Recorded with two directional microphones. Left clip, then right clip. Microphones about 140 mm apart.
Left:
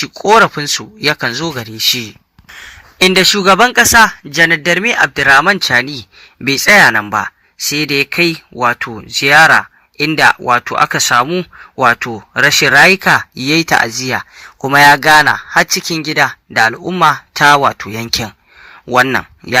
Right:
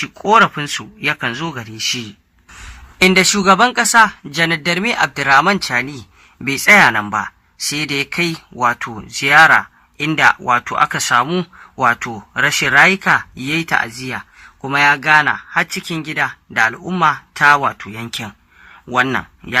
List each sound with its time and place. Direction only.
0.0 s speech: 25° left (ahead or behind); by 18.3 s 45° left (ahead or behind)